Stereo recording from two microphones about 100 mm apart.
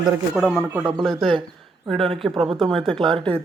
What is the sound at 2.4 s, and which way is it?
Speech, 5° left (ahead or behind).